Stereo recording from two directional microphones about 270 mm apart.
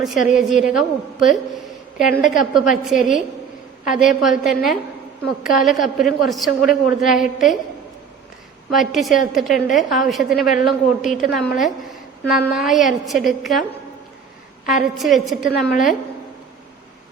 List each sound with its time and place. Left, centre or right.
0.0 s a woman's voice: centre
2.2 s a woman's voice: left
2.6 s a woman's voice: centre
8.7 s a woman's voice: centre
14.8 s a woman's voice: centre